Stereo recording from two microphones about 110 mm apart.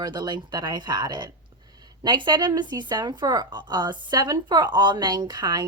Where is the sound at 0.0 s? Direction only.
40° right (ahead or behind).